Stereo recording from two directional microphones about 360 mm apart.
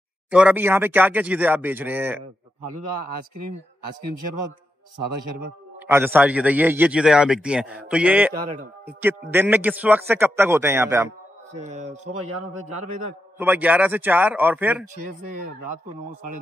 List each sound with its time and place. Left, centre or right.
0.3 s a man's voice: centre
5.9 s a man's voice: centre
11.5 s speech: centre
13.4 s a man's voice: centre
15.0 s speech: right